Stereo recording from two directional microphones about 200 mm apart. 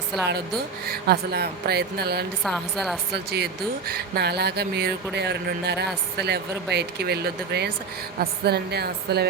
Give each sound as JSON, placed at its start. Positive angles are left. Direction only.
{"t": 0.9, "sound": "speech", "side_deg": -55}
{"t": 2.4, "sound": "a woman's voice", "side_deg": 0}
{"t": 3.1, "sound": "speech", "side_deg": -55}